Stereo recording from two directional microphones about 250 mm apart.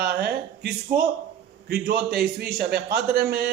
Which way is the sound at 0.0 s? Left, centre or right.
Right.